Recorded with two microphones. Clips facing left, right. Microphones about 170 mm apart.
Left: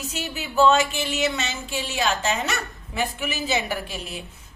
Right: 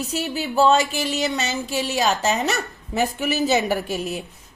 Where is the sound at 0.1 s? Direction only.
35° right (ahead or behind).